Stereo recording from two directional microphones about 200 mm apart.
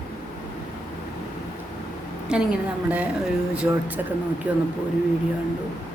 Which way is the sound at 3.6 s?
15° right (ahead or behind).